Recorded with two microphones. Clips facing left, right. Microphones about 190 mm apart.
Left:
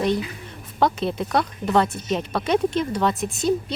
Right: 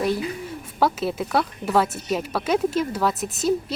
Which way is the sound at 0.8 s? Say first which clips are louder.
Left 1 dB; 5° right (ahead or behind).